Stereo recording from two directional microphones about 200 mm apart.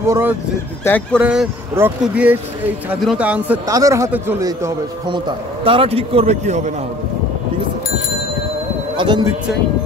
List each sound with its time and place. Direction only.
0.0 s a man's voice: 10° right (ahead or behind)
0.8 s speech: 10° left (ahead or behind)
1.2 s a man's voice: 5° right (ahead or behind); by 6.7 s 35° right (ahead or behind)
8.9 s speech: 20° right (ahead or behind)